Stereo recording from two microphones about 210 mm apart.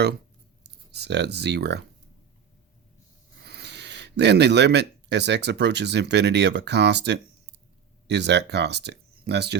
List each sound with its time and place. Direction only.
0.6 s speech: 55° right (ahead or behind)
3.4 s speech: 50° right (ahead or behind)